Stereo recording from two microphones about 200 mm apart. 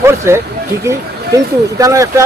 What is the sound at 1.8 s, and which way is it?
Speech, 15° right (ahead or behind).